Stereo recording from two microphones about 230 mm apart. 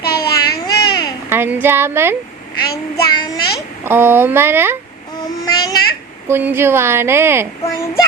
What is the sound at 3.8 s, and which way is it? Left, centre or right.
Speech, centre.